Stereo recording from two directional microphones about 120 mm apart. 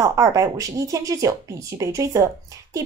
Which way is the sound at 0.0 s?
25° right (ahead or behind).